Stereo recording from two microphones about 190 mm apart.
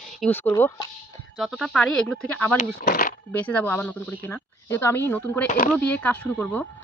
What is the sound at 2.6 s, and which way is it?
Speech, 45° left (ahead or behind).